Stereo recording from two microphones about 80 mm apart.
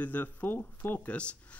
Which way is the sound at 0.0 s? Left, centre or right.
Left.